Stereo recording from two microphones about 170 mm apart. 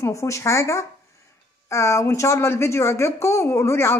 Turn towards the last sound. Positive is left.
turn(degrees=15)  # may be behind; listen again after turning